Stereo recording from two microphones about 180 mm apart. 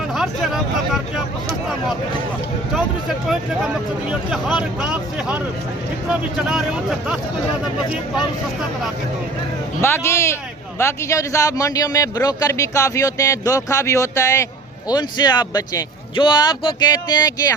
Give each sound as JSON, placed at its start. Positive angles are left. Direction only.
{"t": 0.1, "sound": "speech", "side_deg": 0}
{"t": 2.7, "sound": "speech", "side_deg": 0}
{"t": 4.8, "sound": "speech", "side_deg": -5}
{"t": 9.8, "sound": "a man's voice", "side_deg": 15}